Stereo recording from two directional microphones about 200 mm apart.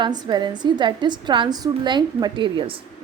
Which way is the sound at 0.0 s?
20° right (ahead or behind).